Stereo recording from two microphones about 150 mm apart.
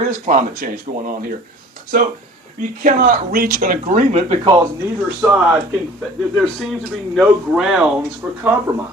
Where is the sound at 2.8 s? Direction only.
65° right (ahead or behind); by 4.4 s 50° right (ahead or behind).